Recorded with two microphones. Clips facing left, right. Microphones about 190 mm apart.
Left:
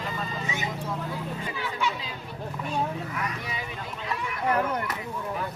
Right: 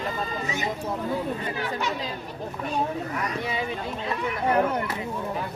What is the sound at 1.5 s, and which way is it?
Chatter, 40° right (ahead or behind).